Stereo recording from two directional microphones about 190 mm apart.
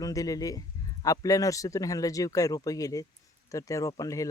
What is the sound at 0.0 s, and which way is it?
Speech, 20° left (ahead or behind).